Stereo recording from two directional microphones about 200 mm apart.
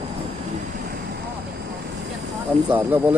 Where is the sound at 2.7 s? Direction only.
5° right (ahead or behind).